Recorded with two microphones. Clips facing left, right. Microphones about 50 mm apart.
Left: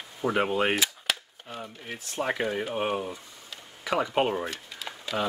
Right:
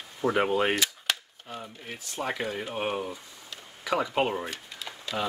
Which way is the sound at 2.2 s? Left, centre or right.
Centre.